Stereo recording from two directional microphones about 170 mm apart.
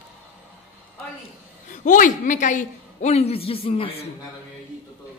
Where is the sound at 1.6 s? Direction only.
45° left (ahead or behind).